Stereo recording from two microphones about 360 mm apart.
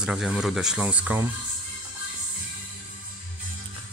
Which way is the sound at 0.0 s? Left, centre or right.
Centre.